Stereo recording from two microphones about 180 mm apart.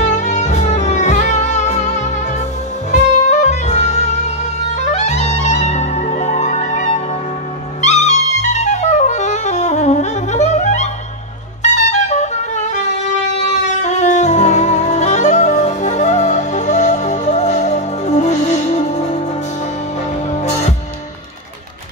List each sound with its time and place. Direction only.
0.0 s music: 40° left (ahead or behind)
2.9 s saxophone: 40° left (ahead or behind)
4.7 s music: 40° left (ahead or behind)
13.8 s music: 40° left (ahead or behind)